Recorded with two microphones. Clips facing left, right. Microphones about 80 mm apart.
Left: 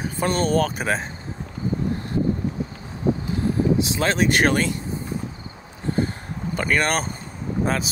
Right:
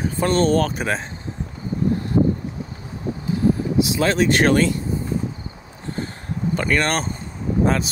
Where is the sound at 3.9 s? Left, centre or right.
Left.